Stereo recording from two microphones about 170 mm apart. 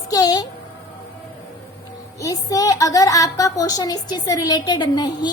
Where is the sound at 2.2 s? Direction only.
20° left (ahead or behind).